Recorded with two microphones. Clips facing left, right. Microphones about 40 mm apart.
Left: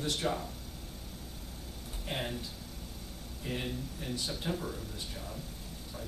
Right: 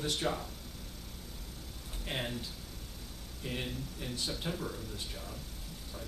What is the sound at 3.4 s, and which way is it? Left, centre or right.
Speech, centre.